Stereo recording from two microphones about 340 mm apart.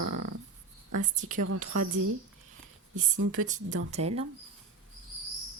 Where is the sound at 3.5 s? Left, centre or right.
Right.